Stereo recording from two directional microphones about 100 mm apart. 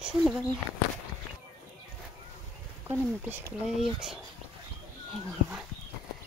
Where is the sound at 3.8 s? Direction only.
5° right (ahead or behind).